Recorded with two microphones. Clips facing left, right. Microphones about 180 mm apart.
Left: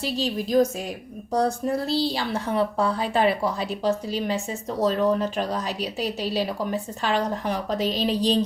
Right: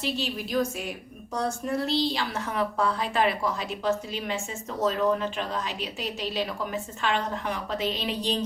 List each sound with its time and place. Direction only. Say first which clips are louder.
0.0 s a woman's voice: left 4 dB; 40° left (ahead or behind)